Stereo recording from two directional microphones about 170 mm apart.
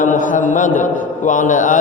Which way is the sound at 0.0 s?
50° left (ahead or behind).